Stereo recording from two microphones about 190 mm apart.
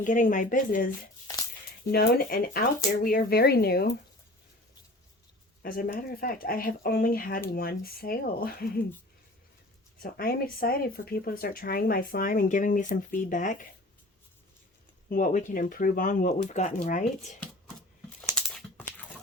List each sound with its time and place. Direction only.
0.0 s speech: 40° left (ahead or behind)
5.6 s speech: 50° left (ahead or behind)
10.0 s speech: 50° left (ahead or behind)
15.1 s speech: 45° left (ahead or behind)
18.3 s crumpling: centre (ahead or behind)